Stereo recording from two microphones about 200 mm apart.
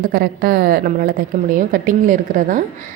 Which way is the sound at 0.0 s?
50° right (ahead or behind).